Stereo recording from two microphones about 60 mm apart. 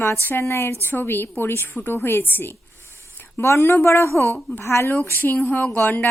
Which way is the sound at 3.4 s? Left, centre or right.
Left.